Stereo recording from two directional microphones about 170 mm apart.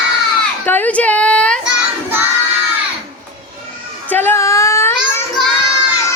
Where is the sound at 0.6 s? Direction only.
10° left (ahead or behind).